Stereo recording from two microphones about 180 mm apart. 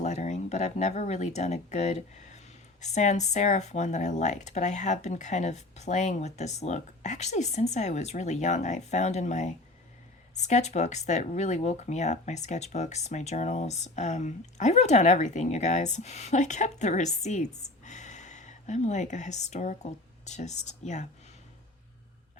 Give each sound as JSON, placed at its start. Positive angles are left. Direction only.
{"t": 0.0, "sound": "speech", "side_deg": 40}